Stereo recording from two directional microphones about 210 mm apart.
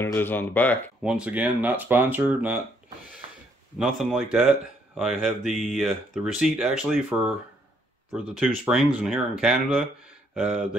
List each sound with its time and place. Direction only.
0.0 s speech: 10° left (ahead or behind)
1.0 s speech: 5° right (ahead or behind)
3.2 s a sound: 25° right (ahead or behind)
3.7 s speech: centre (ahead or behind)